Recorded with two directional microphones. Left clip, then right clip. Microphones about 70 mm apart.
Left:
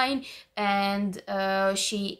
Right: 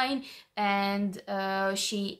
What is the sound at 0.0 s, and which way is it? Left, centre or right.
Speech, left.